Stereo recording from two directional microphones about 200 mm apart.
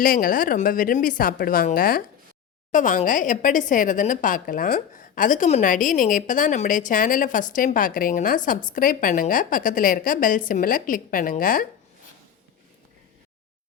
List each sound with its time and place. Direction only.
0.0 s a woman's voice: 45° left (ahead or behind)